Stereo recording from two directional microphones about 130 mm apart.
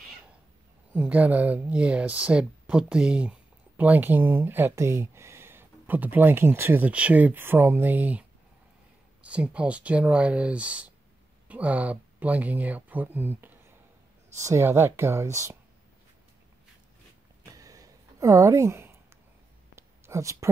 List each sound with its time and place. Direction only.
0.9 s speech: 10° right (ahead or behind)
17.5 s a sound: 25° right (ahead or behind)
20.1 s speech: 25° right (ahead or behind)